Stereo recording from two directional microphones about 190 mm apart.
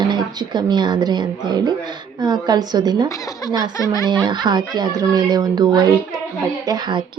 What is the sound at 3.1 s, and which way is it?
Speech, 20° left (ahead or behind).